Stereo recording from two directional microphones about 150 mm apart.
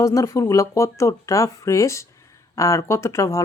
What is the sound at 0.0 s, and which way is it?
Speech, 20° left (ahead or behind).